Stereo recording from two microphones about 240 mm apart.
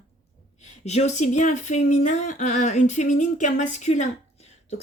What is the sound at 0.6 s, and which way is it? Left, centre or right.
Speech, left.